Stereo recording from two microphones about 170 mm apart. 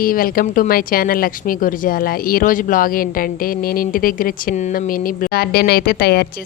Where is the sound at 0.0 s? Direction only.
55° left (ahead or behind).